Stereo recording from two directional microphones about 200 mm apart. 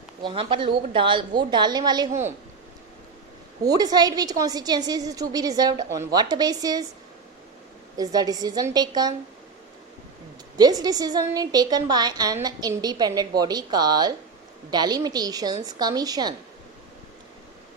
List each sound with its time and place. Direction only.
0.2 s a woman's voice: 25° right (ahead or behind)
3.6 s a woman's voice: 20° right (ahead or behind)
7.9 s a woman's voice: 20° right (ahead or behind)
10.6 s a woman's voice: 20° right (ahead or behind)